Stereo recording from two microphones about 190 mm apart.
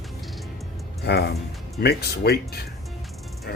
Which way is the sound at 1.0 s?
55° left (ahead or behind).